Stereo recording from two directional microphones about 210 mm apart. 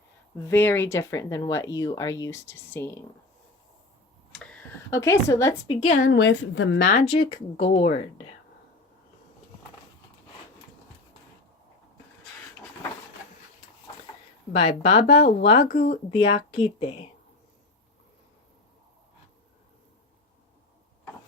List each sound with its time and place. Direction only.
0.3 s speech: 10° left (ahead or behind)
4.3 s a sound: 5° left (ahead or behind)
6.1 s a woman's voice: 60° left (ahead or behind)
6.9 s speech: 25° left (ahead or behind)
14.5 s speech: 30° left (ahead or behind)
15.7 s speech: 45° left (ahead or behind)
16.1 s speech: 25° left (ahead or behind)